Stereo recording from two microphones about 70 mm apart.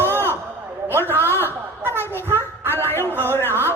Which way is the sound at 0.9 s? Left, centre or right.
Right.